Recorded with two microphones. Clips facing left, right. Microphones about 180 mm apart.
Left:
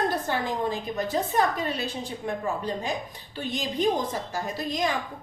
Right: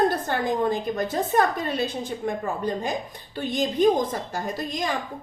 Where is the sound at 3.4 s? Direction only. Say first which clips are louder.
Right 5 dB; 50° right (ahead or behind).